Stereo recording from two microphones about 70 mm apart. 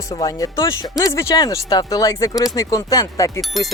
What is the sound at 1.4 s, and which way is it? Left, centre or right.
Speech, left.